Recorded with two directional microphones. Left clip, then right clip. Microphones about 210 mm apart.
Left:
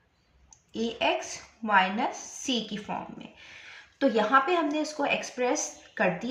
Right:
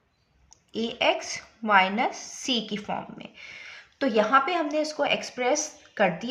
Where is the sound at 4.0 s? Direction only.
40° right (ahead or behind).